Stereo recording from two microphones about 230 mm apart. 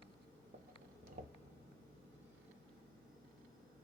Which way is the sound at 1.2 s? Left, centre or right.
Right.